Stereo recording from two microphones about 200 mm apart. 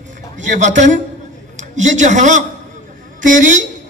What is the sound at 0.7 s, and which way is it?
A man's voice, 40° right (ahead or behind).